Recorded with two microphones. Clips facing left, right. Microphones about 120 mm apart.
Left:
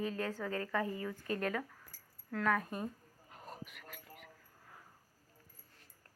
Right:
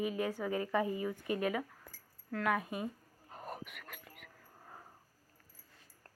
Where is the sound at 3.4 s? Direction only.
65° right (ahead or behind).